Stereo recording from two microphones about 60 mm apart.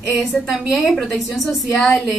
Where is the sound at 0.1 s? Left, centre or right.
Centre.